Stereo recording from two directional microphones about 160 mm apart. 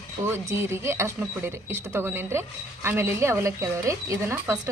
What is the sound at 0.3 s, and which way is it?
A woman's voice, 15° right (ahead or behind).